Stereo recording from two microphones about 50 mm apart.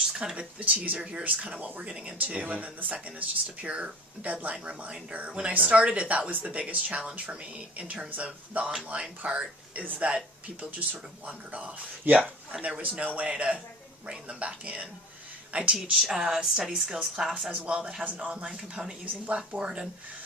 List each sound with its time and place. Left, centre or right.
0.0 s a sound: centre
0.6 s speech: right
10.6 s speech: right
15.9 s speech: centre
17.0 s speech: centre
17.5 s speech: right
18.5 s speech: centre
19.2 s speech: right